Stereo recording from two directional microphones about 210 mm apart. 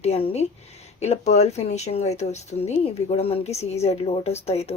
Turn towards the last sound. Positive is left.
turn(degrees=30)  # may be behind; listen again after turning